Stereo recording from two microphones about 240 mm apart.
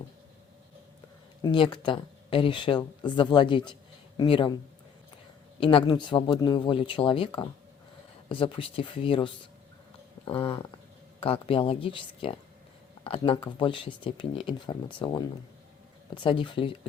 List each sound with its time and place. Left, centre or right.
1.4 s speech: centre
5.5 s speech: left